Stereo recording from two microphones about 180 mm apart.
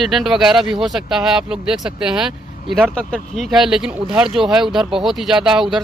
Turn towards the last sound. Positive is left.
turn(degrees=0)  # may be behind; listen again after turning